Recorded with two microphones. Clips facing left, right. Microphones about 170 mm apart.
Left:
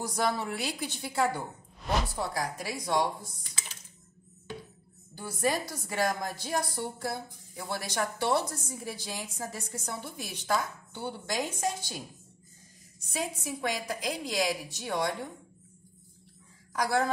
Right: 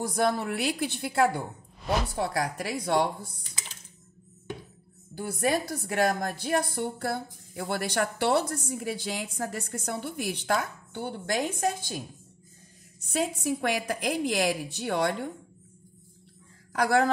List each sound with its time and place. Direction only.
0.0 s a woman's voice: 55° right (ahead or behind)
2.1 s a woman's voice: 65° right (ahead or behind)
5.1 s a woman's voice: 60° right (ahead or behind)
13.0 s a woman's voice: 65° right (ahead or behind)
16.7 s speech: 70° right (ahead or behind)